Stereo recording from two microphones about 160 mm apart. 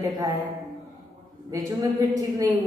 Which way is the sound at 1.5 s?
20° right (ahead or behind).